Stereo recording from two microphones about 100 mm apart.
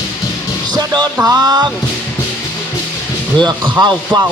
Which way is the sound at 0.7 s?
40° right (ahead or behind).